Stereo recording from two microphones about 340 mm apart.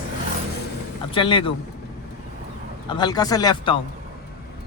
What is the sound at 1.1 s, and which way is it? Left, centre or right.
Speech, centre.